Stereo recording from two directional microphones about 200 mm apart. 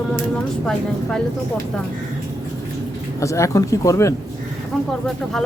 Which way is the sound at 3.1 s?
15° left (ahead or behind).